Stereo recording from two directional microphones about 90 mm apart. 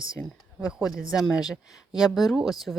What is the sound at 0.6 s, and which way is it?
Speech, 5° right (ahead or behind).